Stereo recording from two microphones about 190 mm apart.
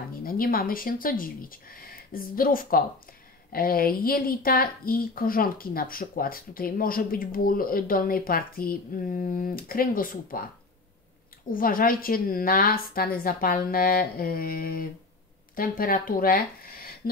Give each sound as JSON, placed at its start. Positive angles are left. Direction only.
{"t": 0.2, "sound": "a woman's voice", "side_deg": 50}
{"t": 11.5, "sound": "a woman's voice", "side_deg": 50}